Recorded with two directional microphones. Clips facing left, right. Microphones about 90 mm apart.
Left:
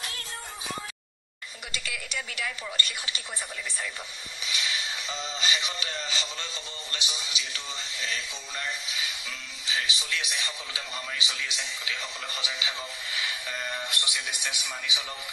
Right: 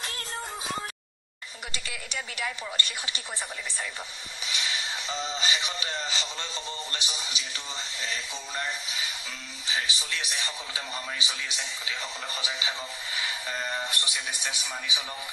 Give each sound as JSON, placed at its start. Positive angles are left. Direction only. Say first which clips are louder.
{"t": 1.7, "sound": "speech", "louder": "left 3 dB", "side_deg": -30}
{"t": 4.5, "sound": "vehicle", "louder": "even", "side_deg": -35}
{"t": 5.2, "sound": "speech", "louder": "even", "side_deg": -25}